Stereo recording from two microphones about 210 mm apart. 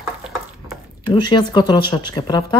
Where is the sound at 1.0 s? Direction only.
20° left (ahead or behind).